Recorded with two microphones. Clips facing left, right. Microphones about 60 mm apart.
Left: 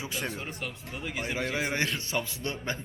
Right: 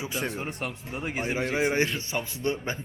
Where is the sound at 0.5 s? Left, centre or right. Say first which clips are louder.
Right 4 dB; right.